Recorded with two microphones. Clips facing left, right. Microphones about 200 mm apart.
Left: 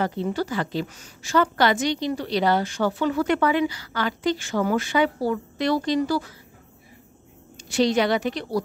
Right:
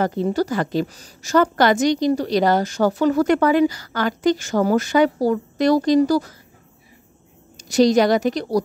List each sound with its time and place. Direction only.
0.0 s a woman's voice: 45° right (ahead or behind)
7.5 s a woman's voice: 40° right (ahead or behind)